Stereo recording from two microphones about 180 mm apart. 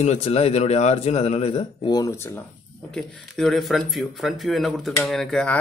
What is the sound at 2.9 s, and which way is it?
Speech, 5° left (ahead or behind).